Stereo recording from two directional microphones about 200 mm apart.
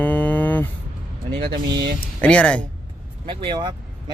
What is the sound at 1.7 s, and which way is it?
Speech, 55° right (ahead or behind).